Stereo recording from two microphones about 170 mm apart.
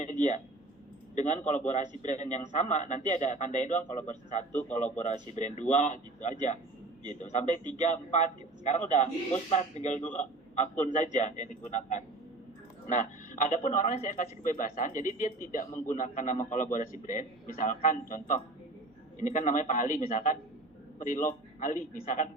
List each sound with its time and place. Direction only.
0.0 s a man's voice: 45° left (ahead or behind)
7.1 s a man's voice: 45° left (ahead or behind)